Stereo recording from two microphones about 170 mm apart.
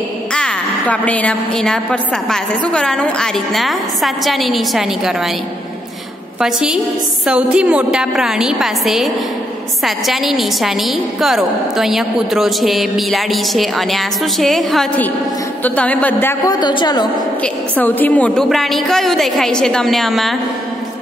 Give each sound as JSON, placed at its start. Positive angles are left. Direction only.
{"t": 0.3, "sound": "a woman's voice", "side_deg": 5}
{"t": 6.4, "sound": "a woman's voice", "side_deg": -5}
{"t": 16.5, "sound": "a woman's voice", "side_deg": 25}
{"t": 17.4, "sound": "a woman's voice", "side_deg": 10}